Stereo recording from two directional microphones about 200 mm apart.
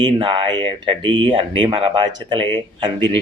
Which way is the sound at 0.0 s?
25° right (ahead or behind).